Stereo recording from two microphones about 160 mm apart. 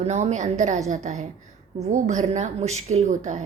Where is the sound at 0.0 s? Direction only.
45° right (ahead or behind).